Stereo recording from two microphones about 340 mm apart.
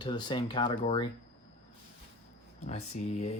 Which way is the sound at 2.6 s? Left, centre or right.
Centre.